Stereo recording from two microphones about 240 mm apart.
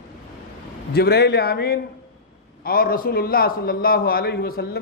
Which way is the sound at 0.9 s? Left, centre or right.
Left.